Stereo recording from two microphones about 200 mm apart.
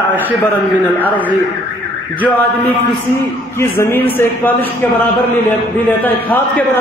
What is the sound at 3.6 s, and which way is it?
Speech, 10° left (ahead or behind).